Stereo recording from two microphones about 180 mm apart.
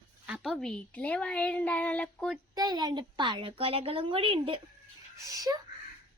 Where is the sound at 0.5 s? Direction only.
5° left (ahead or behind).